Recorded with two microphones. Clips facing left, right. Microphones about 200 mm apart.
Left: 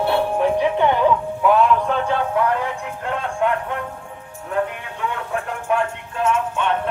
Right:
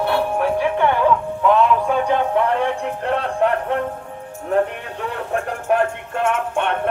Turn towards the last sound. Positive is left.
turn(degrees=-60)  # may be behind; listen again after turning